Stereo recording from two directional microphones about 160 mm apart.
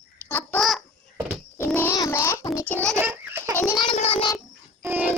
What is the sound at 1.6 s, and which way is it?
Child singing, 10° left (ahead or behind).